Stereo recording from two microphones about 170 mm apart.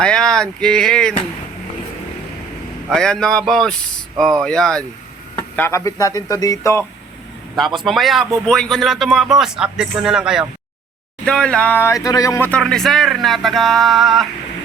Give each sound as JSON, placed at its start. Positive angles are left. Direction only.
{"t": 0.0, "sound": "speech", "side_deg": 5}
{"t": 2.9, "sound": "speech", "side_deg": 5}
{"t": 5.4, "sound": "speech", "side_deg": 15}
{"t": 7.9, "sound": "speech", "side_deg": 0}
{"t": 12.5, "sound": "speech", "side_deg": 5}